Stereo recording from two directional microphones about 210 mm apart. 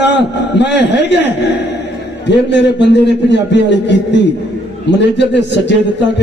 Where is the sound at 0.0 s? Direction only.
55° left (ahead or behind).